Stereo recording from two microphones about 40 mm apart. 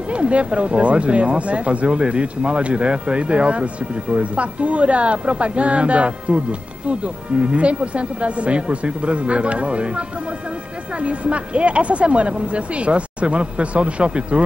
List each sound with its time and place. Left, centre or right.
0.1 s a woman's voice: right